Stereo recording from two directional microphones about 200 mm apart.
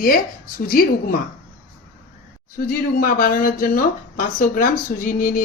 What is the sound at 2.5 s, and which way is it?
Speech, 45° left (ahead or behind).